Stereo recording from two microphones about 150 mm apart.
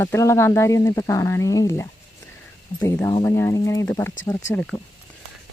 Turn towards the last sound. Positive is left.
turn(degrees=20)  # may be behind; listen again after turning